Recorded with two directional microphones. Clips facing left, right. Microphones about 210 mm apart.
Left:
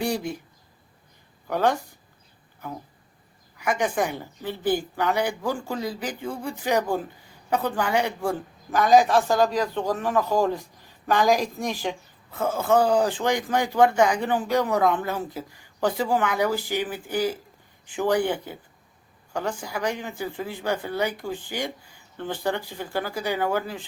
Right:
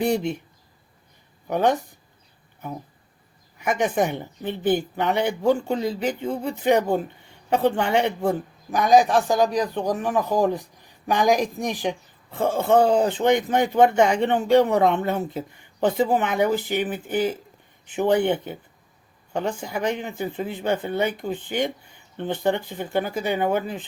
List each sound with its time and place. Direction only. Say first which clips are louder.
0.0 s speech: right 4 dB; 25° right (ahead or behind)
1.5 s speech: right 2 dB; 20° right (ahead or behind)
3.6 s speech: right 2 dB; 20° right (ahead or behind)
12.3 s speech: right 3 dB; 30° right (ahead or behind)